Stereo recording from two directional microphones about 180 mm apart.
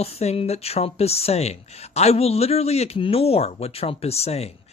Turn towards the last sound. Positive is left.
turn(degrees=35)  # may be behind; listen again after turning